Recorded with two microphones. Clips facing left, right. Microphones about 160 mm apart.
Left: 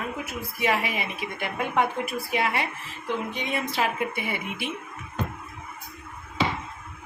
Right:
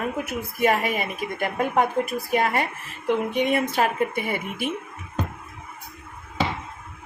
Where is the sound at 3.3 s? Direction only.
55° right (ahead or behind).